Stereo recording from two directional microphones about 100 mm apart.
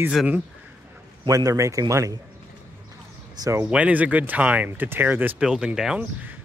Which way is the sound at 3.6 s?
15° right (ahead or behind).